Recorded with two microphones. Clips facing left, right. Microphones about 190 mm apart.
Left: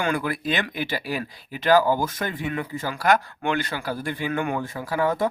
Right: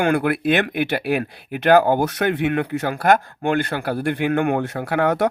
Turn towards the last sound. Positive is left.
turn(degrees=-75)  # may be behind; listen again after turning